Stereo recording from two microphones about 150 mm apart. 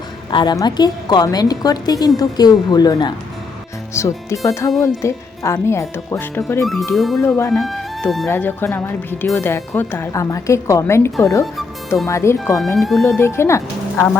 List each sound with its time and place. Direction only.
0.3 s a woman's voice: 30° left (ahead or behind); by 6.7 s 15° left (ahead or behind)
6.9 s speech: centre (ahead or behind)
8.3 s speech: 15° left (ahead or behind)
12.5 s speech: centre (ahead or behind)
13.1 s speech: 15° left (ahead or behind)